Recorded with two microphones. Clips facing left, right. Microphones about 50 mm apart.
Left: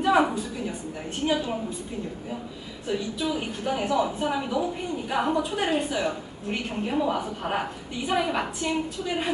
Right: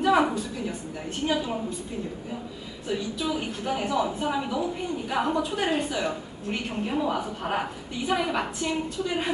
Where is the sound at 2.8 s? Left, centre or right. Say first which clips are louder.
Left 1 dB; centre.